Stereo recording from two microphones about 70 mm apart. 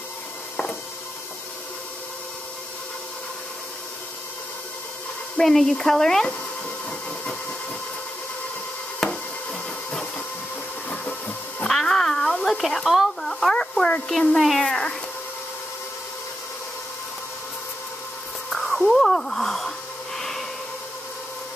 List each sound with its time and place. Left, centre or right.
5.4 s speech: centre
6.9 s train: centre
9.1 s a sound: centre
11.6 s a sound: centre
14.3 s speech: centre
18.5 s speech: centre
20.2 s snort: centre